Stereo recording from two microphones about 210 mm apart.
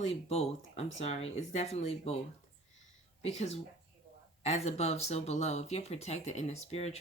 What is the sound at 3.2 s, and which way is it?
Speech, 30° left (ahead or behind).